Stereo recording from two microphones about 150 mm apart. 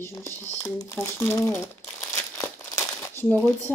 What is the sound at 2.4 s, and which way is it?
Crumpling, 15° left (ahead or behind).